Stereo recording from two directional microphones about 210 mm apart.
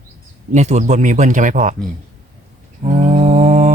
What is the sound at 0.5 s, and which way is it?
Speech, 35° right (ahead or behind).